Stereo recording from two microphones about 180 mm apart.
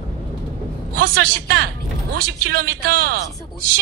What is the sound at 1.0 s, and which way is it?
A man's voice, 55° right (ahead or behind).